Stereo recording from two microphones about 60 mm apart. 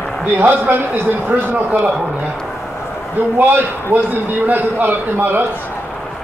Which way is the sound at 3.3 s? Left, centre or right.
Right.